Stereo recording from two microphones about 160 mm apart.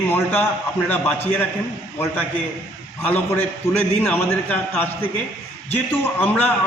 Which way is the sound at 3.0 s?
10° left (ahead or behind).